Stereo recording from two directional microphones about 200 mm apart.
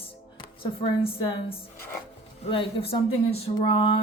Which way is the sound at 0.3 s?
25° left (ahead or behind).